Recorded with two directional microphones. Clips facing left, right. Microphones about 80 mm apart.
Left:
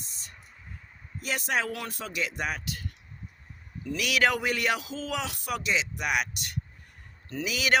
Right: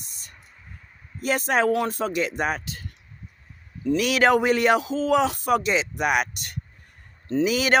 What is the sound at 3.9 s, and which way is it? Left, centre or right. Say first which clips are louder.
Speech: right 7 dB; right.